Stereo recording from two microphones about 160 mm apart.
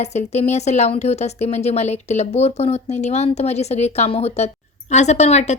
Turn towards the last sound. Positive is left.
turn(degrees=45)  # may be behind; listen again after turning